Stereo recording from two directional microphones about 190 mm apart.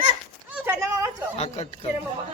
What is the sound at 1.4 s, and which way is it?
Speech, 35° left (ahead or behind).